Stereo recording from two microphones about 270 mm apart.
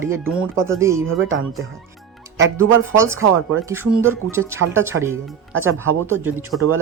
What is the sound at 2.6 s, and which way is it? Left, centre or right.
Speech, centre.